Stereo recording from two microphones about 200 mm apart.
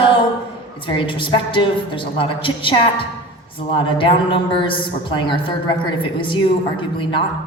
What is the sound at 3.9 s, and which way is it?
A woman's voice, 25° left (ahead or behind).